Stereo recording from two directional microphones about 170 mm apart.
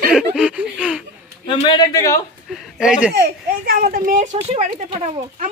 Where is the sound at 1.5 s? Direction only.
30° left (ahead or behind).